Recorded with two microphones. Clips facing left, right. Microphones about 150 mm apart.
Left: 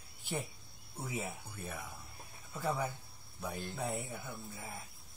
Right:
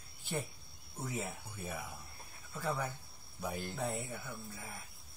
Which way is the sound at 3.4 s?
Centre (ahead or behind).